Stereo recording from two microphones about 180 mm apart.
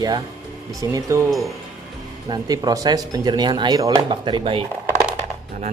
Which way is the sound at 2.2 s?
25° right (ahead or behind).